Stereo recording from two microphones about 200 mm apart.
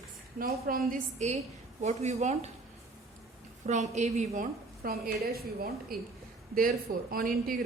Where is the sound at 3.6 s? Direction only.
35° right (ahead or behind).